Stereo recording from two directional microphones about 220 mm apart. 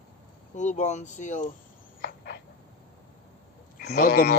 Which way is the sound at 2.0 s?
40° left (ahead or behind).